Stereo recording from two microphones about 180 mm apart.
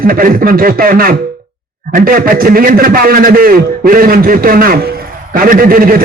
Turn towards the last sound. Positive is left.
turn(degrees=-55)  # may be behind; listen again after turning